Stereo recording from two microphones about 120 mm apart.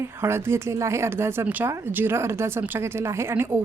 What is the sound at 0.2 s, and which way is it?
Speech, 20° right (ahead or behind).